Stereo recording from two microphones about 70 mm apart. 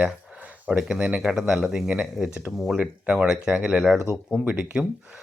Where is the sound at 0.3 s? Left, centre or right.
Centre.